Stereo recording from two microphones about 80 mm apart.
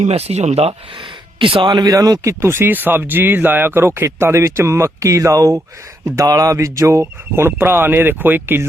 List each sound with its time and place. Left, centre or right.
1.4 s speech: right